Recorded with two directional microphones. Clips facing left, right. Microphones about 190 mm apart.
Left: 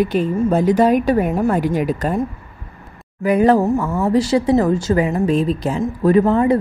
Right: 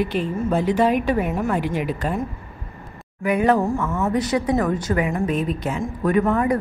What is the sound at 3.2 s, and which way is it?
A woman's voice, 35° left (ahead or behind).